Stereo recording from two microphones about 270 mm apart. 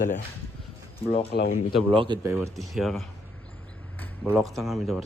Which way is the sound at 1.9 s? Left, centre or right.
Centre.